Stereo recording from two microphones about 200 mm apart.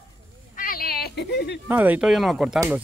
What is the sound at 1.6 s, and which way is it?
Speech, 10° right (ahead or behind).